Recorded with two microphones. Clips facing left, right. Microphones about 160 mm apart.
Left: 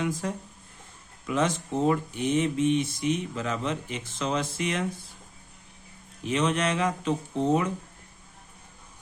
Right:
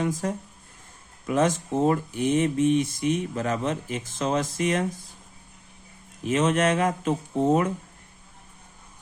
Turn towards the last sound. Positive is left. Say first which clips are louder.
# right 3 dB
turn(degrees=-50)  # may be behind; listen again after turning